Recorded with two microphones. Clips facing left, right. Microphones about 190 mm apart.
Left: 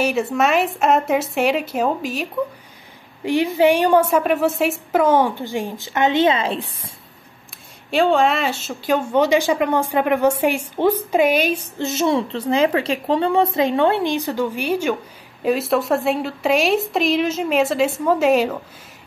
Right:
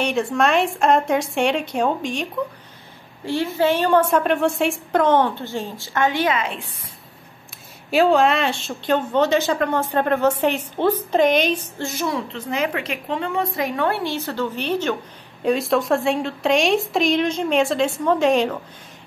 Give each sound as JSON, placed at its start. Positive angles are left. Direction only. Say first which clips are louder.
{"t": 0.0, "sound": "speech", "louder": "left 1 dB", "side_deg": 5}
{"t": 3.3, "sound": "a woman's voice", "louder": "left 4 dB", "side_deg": 15}
{"t": 7.9, "sound": "a woman's voice", "louder": "even", "side_deg": 0}
{"t": 11.8, "sound": "a woman's voice", "louder": "left 9 dB", "side_deg": 25}